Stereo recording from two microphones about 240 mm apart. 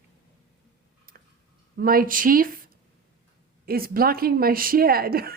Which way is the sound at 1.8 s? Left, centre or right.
Right.